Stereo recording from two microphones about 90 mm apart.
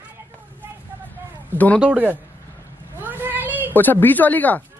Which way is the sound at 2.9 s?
20° right (ahead or behind).